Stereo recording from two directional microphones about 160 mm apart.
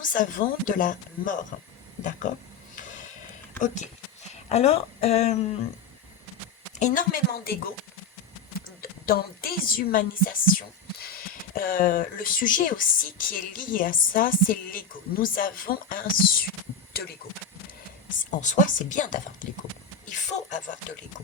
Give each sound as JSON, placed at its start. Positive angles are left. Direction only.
{"t": 0.0, "sound": "a woman's voice", "side_deg": 55}
{"t": 2.7, "sound": "a sound", "side_deg": 55}
{"t": 3.6, "sound": "speech", "side_deg": 45}
{"t": 6.7, "sound": "a woman's voice", "side_deg": 50}
{"t": 9.0, "sound": "a woman's voice", "side_deg": 65}
{"t": 18.2, "sound": "speech", "side_deg": 50}